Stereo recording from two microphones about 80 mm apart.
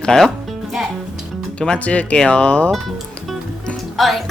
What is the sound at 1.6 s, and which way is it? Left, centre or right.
Speech, centre.